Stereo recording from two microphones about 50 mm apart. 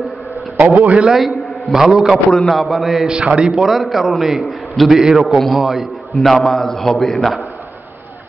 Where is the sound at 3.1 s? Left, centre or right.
Centre.